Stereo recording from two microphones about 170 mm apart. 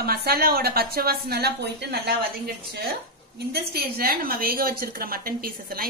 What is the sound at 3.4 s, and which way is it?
A woman's voice, 65° right (ahead or behind).